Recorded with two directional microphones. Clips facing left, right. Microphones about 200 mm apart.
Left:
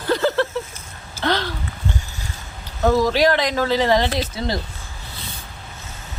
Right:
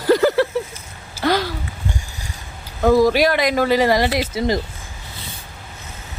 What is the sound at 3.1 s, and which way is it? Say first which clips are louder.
Speech: right 1 dB; 10° right (ahead or behind).